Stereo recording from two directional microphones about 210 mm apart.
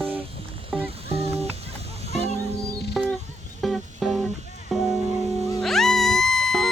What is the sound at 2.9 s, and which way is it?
Music, centre (ahead or behind).